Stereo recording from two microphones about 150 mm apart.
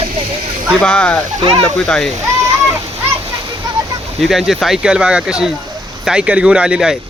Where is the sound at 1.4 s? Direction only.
40° right (ahead or behind).